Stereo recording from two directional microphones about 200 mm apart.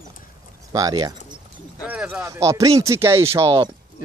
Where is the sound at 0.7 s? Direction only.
20° right (ahead or behind).